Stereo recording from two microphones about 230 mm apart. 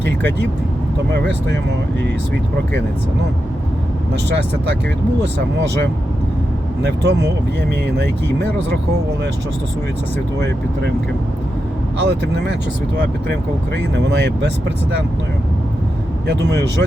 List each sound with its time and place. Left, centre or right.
1.1 s speech: right
4.1 s speech: right
6.8 s speech: right
11.9 s speech: right
13.7 s speech: right